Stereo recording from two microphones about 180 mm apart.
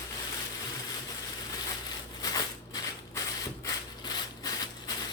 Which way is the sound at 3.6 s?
20° left (ahead or behind).